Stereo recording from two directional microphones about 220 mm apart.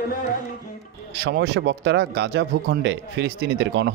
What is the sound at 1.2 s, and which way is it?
A man's voice, 50° right (ahead or behind).